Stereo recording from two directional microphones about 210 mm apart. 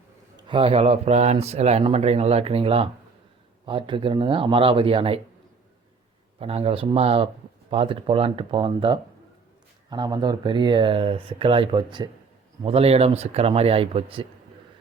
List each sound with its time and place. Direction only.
0.4 s speech: 25° right (ahead or behind)
6.4 s speech: 30° right (ahead or behind)